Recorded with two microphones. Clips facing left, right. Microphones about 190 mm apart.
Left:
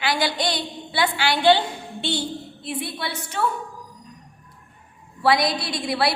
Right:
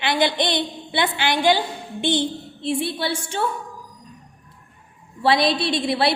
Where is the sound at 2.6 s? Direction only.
30° right (ahead or behind).